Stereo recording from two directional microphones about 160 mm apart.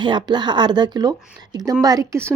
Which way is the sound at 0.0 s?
30° right (ahead or behind).